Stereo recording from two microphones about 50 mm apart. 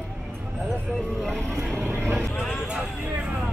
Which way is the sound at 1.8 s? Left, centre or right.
Right.